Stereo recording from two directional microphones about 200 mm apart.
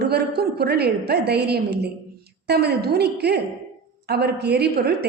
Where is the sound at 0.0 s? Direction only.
55° right (ahead or behind).